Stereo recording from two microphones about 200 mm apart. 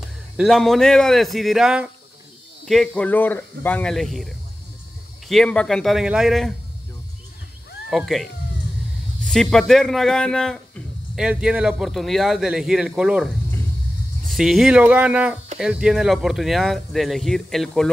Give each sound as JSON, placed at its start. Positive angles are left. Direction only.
{"t": 0.4, "sound": "a man's voice", "side_deg": 0}
{"t": 7.9, "sound": "a man's voice", "side_deg": 0}